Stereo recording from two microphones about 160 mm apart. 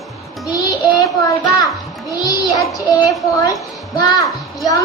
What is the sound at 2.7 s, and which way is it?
Speech, 20° left (ahead or behind).